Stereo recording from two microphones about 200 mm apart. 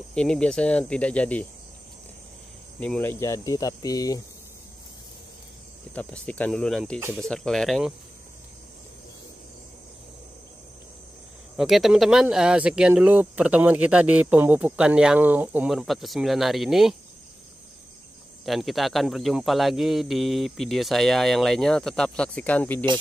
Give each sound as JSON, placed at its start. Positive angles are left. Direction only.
{"t": 0.1, "sound": "speech", "side_deg": 5}
{"t": 2.8, "sound": "speech", "side_deg": 10}
{"t": 5.9, "sound": "speech", "side_deg": 5}
{"t": 11.5, "sound": "speech", "side_deg": 0}
{"t": 18.4, "sound": "speech", "side_deg": 0}